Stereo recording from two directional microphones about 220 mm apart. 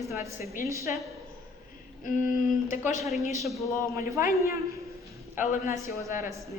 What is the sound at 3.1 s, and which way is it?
Speech, centre (ahead or behind).